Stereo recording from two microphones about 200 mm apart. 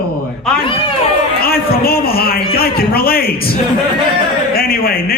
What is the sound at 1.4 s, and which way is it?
A man's voice, 50° left (ahead or behind).